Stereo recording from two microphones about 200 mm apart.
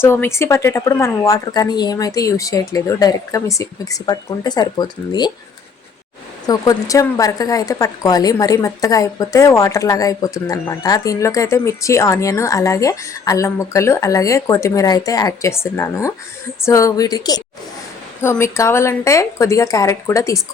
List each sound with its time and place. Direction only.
0.0 s a woman's voice: 10° left (ahead or behind)
6.5 s a woman's voice: 15° left (ahead or behind)